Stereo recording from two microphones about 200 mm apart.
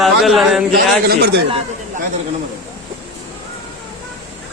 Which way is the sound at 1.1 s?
55° right (ahead or behind).